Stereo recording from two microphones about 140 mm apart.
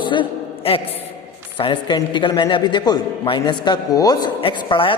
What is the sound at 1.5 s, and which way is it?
A man's voice, 35° left (ahead or behind).